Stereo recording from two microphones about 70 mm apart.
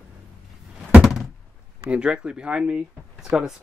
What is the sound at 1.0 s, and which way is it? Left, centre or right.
Thunk, centre.